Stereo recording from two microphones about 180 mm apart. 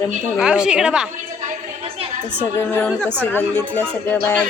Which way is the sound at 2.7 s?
10° left (ahead or behind).